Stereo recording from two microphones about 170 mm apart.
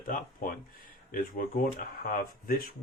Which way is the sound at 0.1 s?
60° left (ahead or behind).